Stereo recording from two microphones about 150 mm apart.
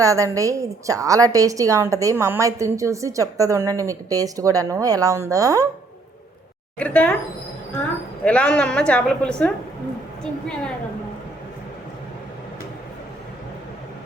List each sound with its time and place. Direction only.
0.0 s a woman's voice: 20° right (ahead or behind)
6.7 s a woman's voice: 10° left (ahead or behind)
8.2 s a woman's voice: 10° left (ahead or behind)